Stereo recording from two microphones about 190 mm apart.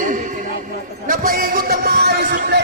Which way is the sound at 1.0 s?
45° right (ahead or behind).